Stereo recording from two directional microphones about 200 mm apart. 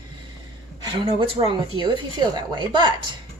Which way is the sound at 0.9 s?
25° right (ahead or behind).